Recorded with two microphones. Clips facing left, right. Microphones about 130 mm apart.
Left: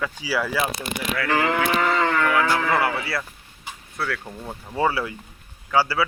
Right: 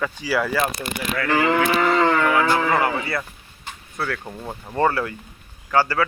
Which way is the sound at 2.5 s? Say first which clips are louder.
Right 2 dB; 20° right (ahead or behind).